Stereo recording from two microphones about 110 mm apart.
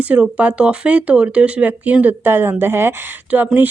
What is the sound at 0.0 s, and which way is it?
Speech, 10° right (ahead or behind).